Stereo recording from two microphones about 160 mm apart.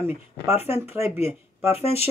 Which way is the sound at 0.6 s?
40° left (ahead or behind).